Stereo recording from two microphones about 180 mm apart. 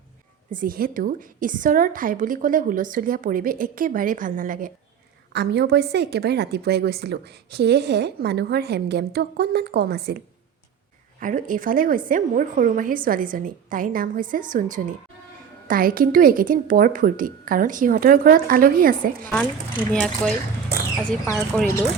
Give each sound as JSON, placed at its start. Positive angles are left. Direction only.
{"t": 0.5, "sound": "a woman's voice", "side_deg": -50}
{"t": 5.3, "sound": "a woman's voice", "side_deg": -65}
{"t": 11.2, "sound": "a woman's voice", "side_deg": -45}
{"t": 19.9, "sound": "speech", "side_deg": 5}
{"t": 21.3, "sound": "speech", "side_deg": 5}